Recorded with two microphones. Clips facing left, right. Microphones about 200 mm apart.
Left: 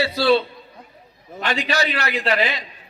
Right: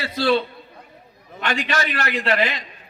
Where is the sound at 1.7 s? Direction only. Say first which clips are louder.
Left 1 dB; 50° right (ahead or behind).